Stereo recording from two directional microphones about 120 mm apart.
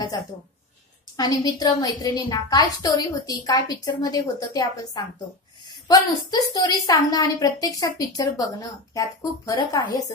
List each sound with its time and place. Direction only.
1.1 s a woman's voice: 30° left (ahead or behind)